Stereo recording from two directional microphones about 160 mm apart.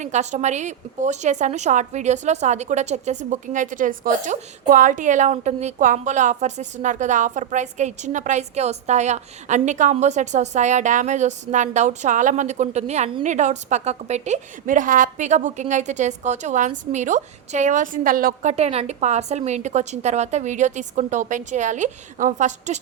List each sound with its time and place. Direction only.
0.0 s a woman's voice: 45° right (ahead or behind)
18.5 s a woman's voice: 40° right (ahead or behind)